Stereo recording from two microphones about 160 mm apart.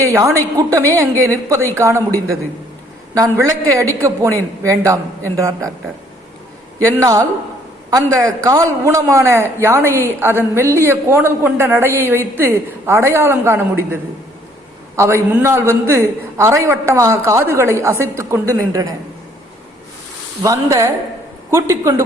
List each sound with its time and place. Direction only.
0.0 s a woman's voice: 20° right (ahead or behind)
6.9 s a woman's voice: 20° right (ahead or behind)
14.9 s a man's voice: 15° right (ahead or behind)
20.4 s a woman's voice: 20° right (ahead or behind)